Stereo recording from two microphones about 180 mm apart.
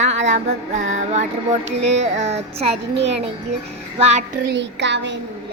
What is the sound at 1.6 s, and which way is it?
Music, 80° right.